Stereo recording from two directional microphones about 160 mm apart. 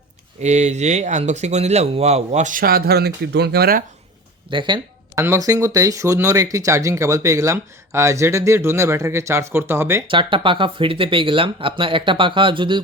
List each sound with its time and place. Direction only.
0.4 s speech: 45° right (ahead or behind); by 3.8 s 70° right (ahead or behind)
4.5 s speech: 30° right (ahead or behind)
5.2 s speech: 20° right (ahead or behind)
10.1 s speech: 30° right (ahead or behind)